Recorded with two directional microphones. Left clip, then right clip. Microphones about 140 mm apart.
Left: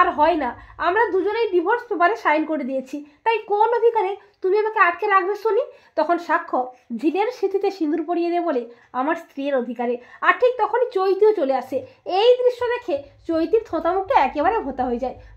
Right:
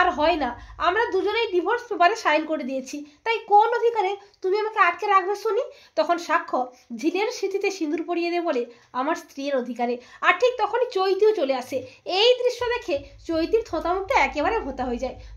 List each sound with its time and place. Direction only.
0.0 s a child's voice: 30° left (ahead or behind)
12.8 s a woman's voice: 50° left (ahead or behind)